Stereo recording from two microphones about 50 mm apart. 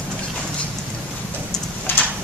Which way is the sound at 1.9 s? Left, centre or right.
Left.